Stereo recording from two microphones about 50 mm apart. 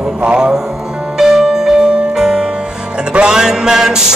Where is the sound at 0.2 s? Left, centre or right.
Centre.